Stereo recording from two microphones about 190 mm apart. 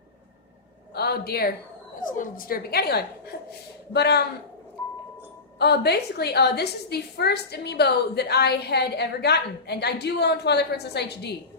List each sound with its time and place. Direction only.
0.9 s a woman's voice: 55° left (ahead or behind)
2.0 s a woman's voice: 45° left (ahead or behind); by 4.2 s 60° left (ahead or behind)
5.5 s a woman's voice: 60° left (ahead or behind)